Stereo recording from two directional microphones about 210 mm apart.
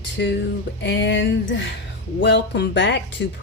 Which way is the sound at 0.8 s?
55° left (ahead or behind).